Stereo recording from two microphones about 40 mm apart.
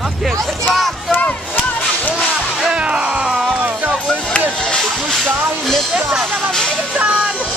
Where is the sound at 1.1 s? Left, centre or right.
Left.